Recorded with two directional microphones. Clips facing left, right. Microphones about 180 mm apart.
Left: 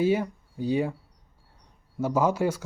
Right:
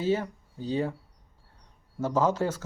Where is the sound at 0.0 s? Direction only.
10° left (ahead or behind).